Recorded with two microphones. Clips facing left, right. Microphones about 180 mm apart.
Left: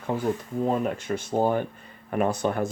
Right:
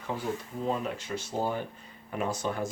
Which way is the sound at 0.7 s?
55° left (ahead or behind).